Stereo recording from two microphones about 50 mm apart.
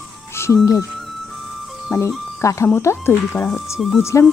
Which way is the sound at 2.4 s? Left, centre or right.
Left.